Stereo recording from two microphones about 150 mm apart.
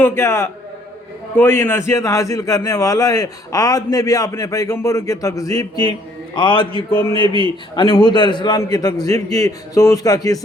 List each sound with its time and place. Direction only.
0.0 s a man's voice: 15° left (ahead or behind)